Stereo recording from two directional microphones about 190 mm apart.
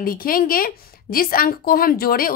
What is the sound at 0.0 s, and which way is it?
A woman's voice, 50° left (ahead or behind).